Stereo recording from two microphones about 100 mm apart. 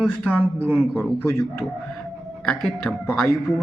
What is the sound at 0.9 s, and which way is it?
Speech, 25° left (ahead or behind).